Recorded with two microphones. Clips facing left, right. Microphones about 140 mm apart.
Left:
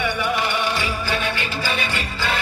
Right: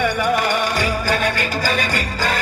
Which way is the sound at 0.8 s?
45° right (ahead or behind).